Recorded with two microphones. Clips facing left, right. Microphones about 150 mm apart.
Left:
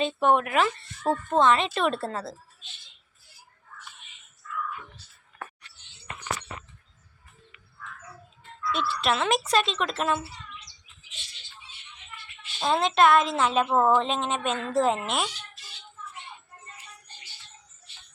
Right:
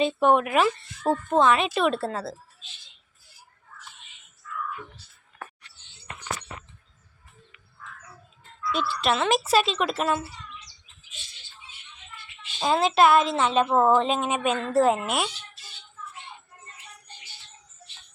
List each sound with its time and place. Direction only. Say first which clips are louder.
0.0 s speech: right 2 dB; 10° right (ahead or behind)
4.4 s whispering: left 1 dB; 45° left (ahead or behind)
8.7 s speech: right 1 dB; centre (ahead or behind)
12.5 s speech: right 2 dB; 5° right (ahead or behind)